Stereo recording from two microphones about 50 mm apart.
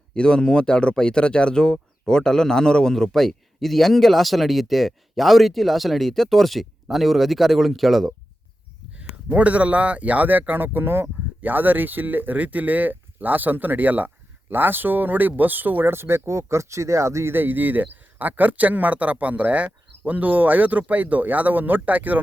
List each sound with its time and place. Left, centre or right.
0.1 s speech: centre
8.9 s speech: right
11.4 s speech: right
15.9 s speech: right
17.3 s speech: right